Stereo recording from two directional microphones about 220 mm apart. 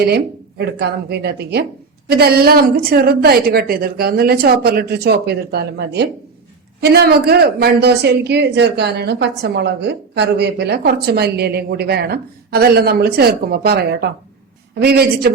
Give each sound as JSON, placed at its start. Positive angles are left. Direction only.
{"t": 0.6, "sound": "a woman's voice", "side_deg": -50}